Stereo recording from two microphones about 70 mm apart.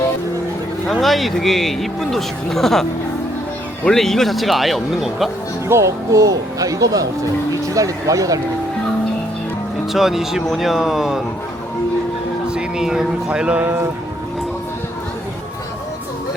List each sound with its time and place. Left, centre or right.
0.9 s speech: centre
3.8 s speech: centre
5.6 s speech: right
9.9 s speech: centre
12.5 s speech: centre